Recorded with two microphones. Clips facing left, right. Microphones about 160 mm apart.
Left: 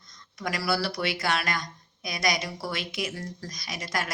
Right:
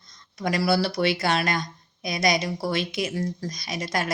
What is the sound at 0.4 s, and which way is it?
Speech, 25° right (ahead or behind).